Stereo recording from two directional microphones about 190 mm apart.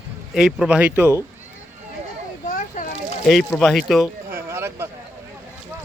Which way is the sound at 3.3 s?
Centre (ahead or behind).